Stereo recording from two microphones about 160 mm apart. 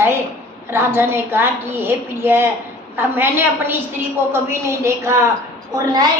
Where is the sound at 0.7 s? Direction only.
15° right (ahead or behind).